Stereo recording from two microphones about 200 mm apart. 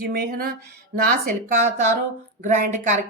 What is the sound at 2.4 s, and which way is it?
Speech, 35° right (ahead or behind).